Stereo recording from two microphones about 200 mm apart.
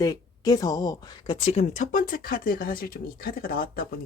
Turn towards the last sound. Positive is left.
turn(degrees=50)  # may be behind; listen again after turning